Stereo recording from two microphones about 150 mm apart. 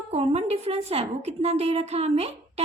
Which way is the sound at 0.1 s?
45° right (ahead or behind).